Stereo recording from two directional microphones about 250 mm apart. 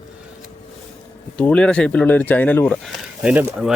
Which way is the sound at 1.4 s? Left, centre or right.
Centre.